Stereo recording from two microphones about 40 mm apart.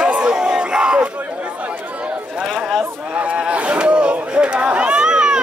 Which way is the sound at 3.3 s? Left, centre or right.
Right.